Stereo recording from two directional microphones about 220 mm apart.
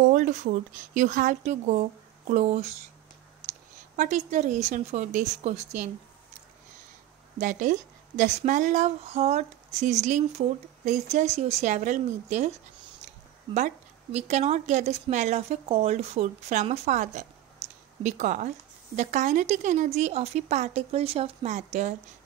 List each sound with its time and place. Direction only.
0.1 s a woman's voice: 35° right (ahead or behind)
3.9 s a woman's voice: 30° right (ahead or behind)
7.3 s a woman's voice: 35° right (ahead or behind)
13.0 s a sound: 30° right (ahead or behind)
14.1 s a woman's voice: 30° right (ahead or behind)
17.6 s a sound: 30° right (ahead or behind)
18.0 s a woman's voice: 35° right (ahead or behind)